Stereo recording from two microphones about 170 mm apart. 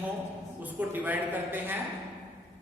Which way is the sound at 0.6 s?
10° right (ahead or behind).